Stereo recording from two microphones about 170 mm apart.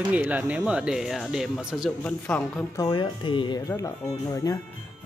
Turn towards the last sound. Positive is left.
turn(degrees=20)  # may be behind; listen again after turning